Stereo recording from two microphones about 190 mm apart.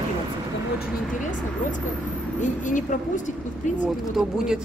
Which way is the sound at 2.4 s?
40° left (ahead or behind).